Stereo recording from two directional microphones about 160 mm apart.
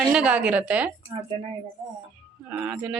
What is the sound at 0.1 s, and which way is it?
Music, 10° right (ahead or behind).